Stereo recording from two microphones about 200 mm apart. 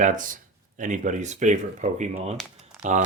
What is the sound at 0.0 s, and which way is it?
Speech, 40° right (ahead or behind).